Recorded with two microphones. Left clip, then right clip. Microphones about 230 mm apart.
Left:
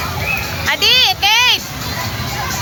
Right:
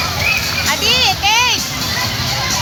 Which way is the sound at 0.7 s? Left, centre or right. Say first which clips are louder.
Left 3 dB; left.